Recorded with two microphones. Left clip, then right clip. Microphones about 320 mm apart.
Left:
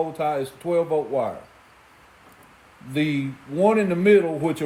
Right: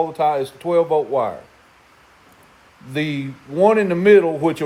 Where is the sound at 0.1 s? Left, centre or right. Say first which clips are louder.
Right 6 dB; centre.